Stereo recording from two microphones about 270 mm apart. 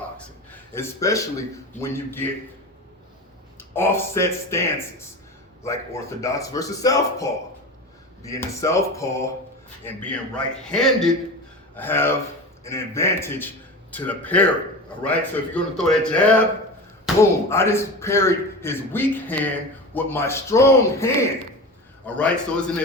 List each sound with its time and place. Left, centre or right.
0.5 s speech: centre
3.6 s a man's voice: centre
17.2 s a man's voice: centre